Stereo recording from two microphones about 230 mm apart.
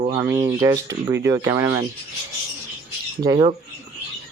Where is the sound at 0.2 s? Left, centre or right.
Centre.